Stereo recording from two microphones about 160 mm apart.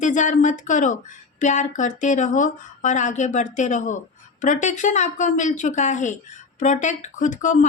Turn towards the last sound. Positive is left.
turn(degrees=50)  # may be behind; listen again after turning